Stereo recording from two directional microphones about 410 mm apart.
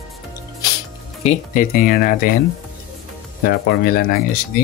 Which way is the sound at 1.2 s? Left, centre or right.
Centre.